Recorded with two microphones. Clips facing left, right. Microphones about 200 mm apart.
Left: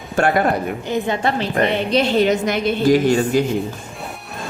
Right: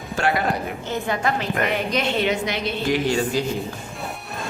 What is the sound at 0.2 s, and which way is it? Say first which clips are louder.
Speech: left 6 dB; 50° left (ahead or behind).